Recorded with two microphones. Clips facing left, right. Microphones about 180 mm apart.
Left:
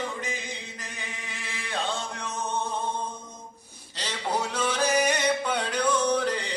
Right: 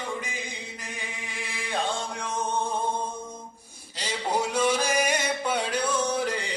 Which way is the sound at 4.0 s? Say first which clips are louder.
Right 2 dB; 10° right (ahead or behind).